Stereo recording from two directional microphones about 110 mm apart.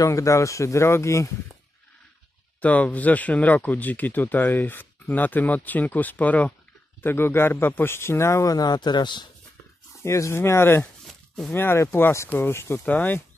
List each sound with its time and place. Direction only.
0.0 s a man's voice: 30° left (ahead or behind)
2.6 s a man's voice: 15° left (ahead or behind); by 9.3 s 40° left (ahead or behind)
10.0 s a man's voice: 25° left (ahead or behind)